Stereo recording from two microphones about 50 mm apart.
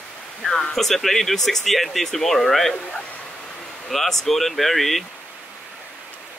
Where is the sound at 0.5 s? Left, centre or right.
Centre.